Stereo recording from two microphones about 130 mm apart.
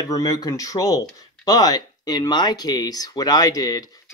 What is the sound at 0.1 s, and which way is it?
Speech, 30° left (ahead or behind).